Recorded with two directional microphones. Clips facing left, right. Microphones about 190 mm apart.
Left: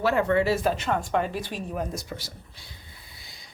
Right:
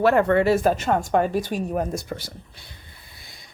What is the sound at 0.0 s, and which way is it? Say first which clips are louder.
A woman's voice: right 5 dB; 55° right (ahead or behind).